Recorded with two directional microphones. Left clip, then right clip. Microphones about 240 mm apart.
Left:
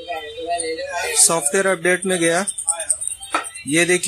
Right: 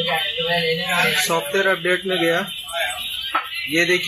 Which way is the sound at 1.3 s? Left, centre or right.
Left.